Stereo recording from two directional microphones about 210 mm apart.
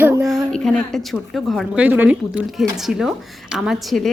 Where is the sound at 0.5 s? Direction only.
Centre (ahead or behind).